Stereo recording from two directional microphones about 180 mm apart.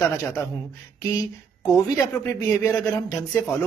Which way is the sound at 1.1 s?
20° left (ahead or behind).